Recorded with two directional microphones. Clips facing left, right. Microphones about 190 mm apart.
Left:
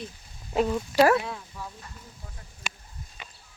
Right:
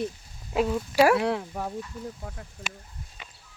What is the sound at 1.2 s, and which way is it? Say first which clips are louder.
Speech: right 6 dB; 75° right (ahead or behind).